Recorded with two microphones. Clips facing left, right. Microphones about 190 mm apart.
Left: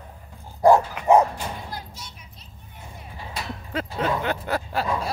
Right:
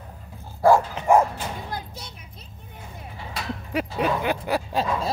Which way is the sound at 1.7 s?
60° right (ahead or behind).